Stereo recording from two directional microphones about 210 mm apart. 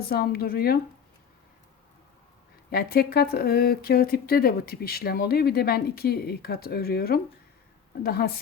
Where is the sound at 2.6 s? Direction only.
45° left (ahead or behind).